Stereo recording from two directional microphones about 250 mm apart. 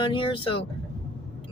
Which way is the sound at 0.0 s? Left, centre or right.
Centre.